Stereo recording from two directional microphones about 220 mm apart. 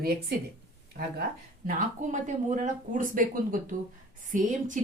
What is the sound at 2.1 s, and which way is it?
A woman's voice, 35° right (ahead or behind).